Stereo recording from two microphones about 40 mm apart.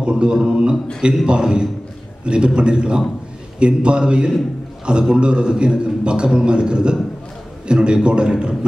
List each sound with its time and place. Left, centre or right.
0.0 s a man's voice: right